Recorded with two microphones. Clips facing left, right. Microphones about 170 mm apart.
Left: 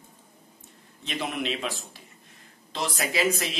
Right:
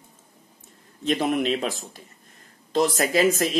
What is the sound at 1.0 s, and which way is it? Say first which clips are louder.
Speech: right 8 dB; 45° right (ahead or behind).